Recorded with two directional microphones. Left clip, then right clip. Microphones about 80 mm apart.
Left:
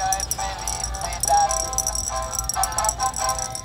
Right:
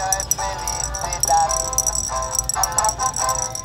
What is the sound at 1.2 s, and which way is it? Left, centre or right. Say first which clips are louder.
Music: right 1 dB; centre.